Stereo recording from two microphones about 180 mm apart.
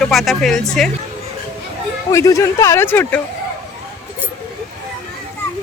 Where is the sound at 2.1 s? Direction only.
15° left (ahead or behind).